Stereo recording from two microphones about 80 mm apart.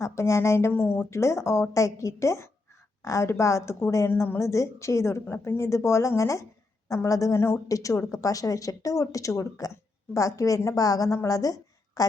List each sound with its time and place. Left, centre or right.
0.0 s speech: left
0.7 s speech: left
1.1 s speech: left
4.4 s speech: left
5.2 s speech: left
7.7 s a woman's voice: left